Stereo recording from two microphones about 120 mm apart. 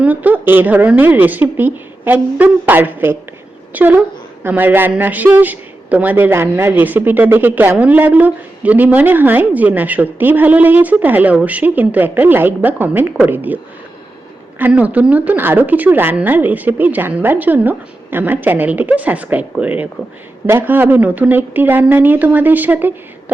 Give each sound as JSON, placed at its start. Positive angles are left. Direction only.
{"t": 0.0, "sound": "a man's voice", "side_deg": -15}
{"t": 14.6, "sound": "a man's voice", "side_deg": -10}